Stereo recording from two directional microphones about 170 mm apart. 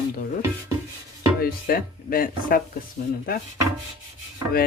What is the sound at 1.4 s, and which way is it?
Speech, 60° left (ahead or behind).